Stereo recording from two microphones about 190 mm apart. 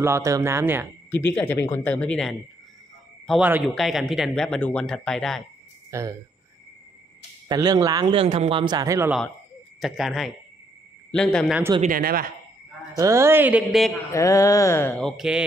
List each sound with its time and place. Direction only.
0.0 s speech: 15° right (ahead or behind)
1.1 s mantra: 10° left (ahead or behind)
3.3 s speech: 5° right (ahead or behind)
5.9 s speech: 15° right (ahead or behind)
7.4 s a man's voice: 20° right (ahead or behind)
9.8 s a man's voice: centre (ahead or behind)
11.8 s speech: 50° right (ahead or behind)
12.9 s speech: 15° right (ahead or behind)
14.1 s mantra: 15° left (ahead or behind); by 15.4 s 5° right (ahead or behind)